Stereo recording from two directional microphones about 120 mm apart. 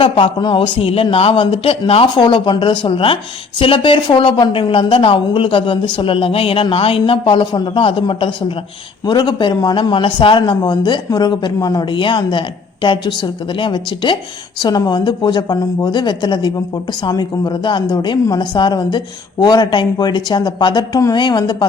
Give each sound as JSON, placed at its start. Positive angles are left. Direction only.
{"t": 0.0, "sound": "a man's voice", "side_deg": 40}